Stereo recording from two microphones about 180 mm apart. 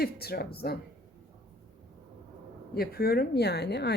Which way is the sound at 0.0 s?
60° left (ahead or behind).